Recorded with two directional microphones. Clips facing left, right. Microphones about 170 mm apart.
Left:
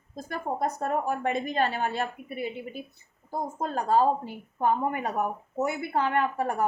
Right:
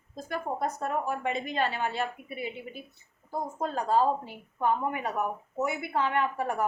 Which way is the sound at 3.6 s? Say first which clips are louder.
Left 2 dB; 45° left (ahead or behind).